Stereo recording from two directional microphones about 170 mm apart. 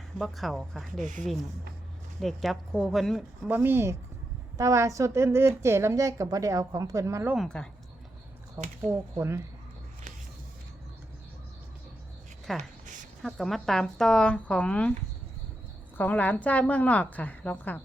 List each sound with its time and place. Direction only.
0.2 s speech: centre (ahead or behind)
2.2 s speech: centre (ahead or behind)
3.4 s a woman's voice: 10° right (ahead or behind)
7.3 s speech: 5° left (ahead or behind)
8.6 s a woman's voice: 15° right (ahead or behind)
12.5 s a sound: 50° right (ahead or behind)
13.2 s speech: centre (ahead or behind)
16.0 s a woman's voice: 10° left (ahead or behind)